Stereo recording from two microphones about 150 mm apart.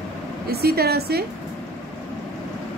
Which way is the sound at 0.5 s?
90° right.